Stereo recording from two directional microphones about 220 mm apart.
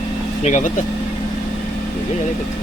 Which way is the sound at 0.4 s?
35° left (ahead or behind).